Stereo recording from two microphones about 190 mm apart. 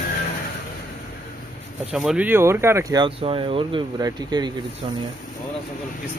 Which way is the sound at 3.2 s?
30° right (ahead or behind).